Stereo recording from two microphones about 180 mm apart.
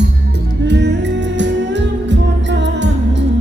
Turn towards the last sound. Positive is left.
turn(degrees=-80)